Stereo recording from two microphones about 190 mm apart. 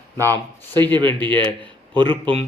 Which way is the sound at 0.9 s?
25° right (ahead or behind).